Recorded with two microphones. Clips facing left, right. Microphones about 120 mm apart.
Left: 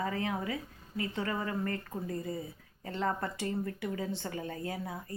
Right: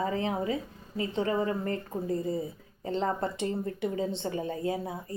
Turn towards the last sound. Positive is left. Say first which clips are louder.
# right 6 dB
turn(degrees=-25)  # may be behind; listen again after turning